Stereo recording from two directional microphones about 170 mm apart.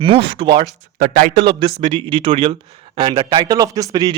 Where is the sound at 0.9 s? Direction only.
60° right (ahead or behind).